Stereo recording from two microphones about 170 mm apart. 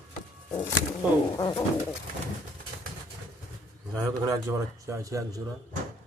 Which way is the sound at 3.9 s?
20° right (ahead or behind).